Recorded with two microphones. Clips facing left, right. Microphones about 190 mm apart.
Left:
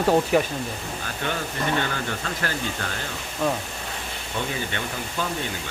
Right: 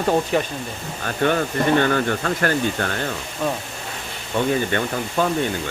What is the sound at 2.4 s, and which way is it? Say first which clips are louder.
Speech: right 8 dB; 55° right (ahead or behind).